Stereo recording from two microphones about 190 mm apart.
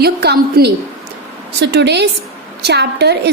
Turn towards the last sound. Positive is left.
turn(degrees=-60)  # may be behind; listen again after turning